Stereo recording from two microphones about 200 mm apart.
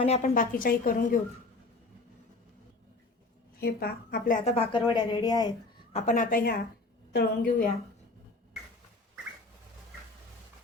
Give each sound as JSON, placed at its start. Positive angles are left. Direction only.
{"t": 0.0, "sound": "a woman's voice", "side_deg": 35}
{"t": 3.6, "sound": "a woman's voice", "side_deg": 50}
{"t": 4.4, "sound": "speech", "side_deg": 30}
{"t": 5.9, "sound": "a woman's voice", "side_deg": 35}